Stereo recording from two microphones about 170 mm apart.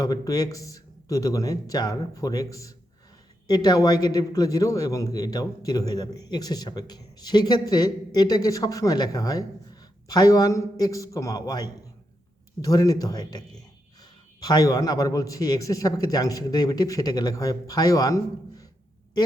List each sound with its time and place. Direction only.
0.0 s a man's voice: 20° left (ahead or behind)
14.4 s a man's voice: 20° left (ahead or behind)